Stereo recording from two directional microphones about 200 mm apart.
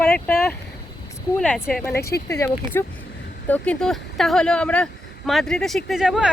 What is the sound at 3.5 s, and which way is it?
Speech, 5° left (ahead or behind).